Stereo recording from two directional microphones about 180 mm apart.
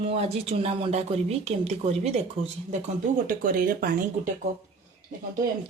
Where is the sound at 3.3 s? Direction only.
50° right (ahead or behind).